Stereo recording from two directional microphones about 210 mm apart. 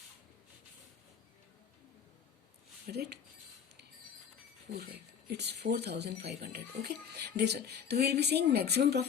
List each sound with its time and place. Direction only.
2.8 s speech: 50° right (ahead or behind)
5.3 s speech: 50° right (ahead or behind)